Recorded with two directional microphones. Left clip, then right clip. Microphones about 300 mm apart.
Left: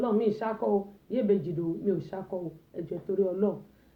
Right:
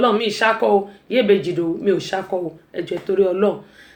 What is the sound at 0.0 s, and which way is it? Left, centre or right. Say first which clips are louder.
Speech: right 11 dB; centre.